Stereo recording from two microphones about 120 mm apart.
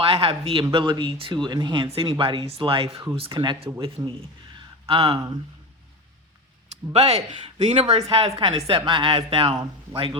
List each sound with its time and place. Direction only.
0.0 s speech: 50° right (ahead or behind)
6.9 s speech: 60° right (ahead or behind); by 10.2 s 45° right (ahead or behind)